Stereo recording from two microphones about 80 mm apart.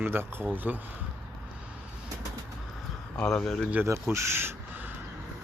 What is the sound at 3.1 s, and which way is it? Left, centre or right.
Speech, centre.